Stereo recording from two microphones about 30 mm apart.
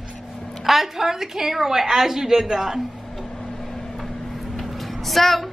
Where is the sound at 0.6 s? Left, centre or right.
Centre.